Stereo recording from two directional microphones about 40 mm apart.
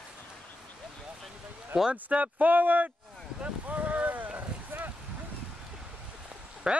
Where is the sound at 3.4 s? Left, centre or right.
Right.